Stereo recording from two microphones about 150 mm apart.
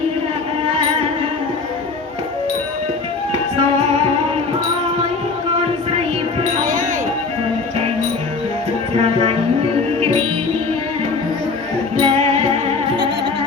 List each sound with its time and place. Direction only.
6.6 s a sound: 65° right (ahead or behind)
10.0 s music: 40° right (ahead or behind)
11.9 s music: 40° right (ahead or behind)